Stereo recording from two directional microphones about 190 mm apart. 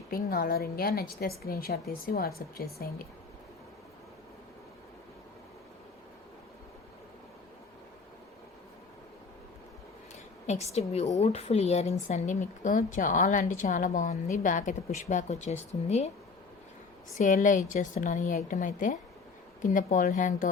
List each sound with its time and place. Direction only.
0.1 s a woman's voice: 50° left (ahead or behind)
10.4 s speech: 35° left (ahead or behind)
17.2 s a woman's voice: 40° left (ahead or behind)